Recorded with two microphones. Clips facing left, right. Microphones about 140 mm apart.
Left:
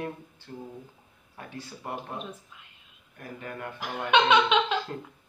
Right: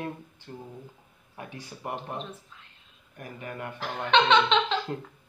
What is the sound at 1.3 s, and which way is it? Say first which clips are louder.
Speech: even; 15° right (ahead or behind).